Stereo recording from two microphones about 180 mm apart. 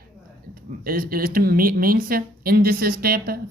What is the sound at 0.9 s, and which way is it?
Speech, 55° right (ahead or behind).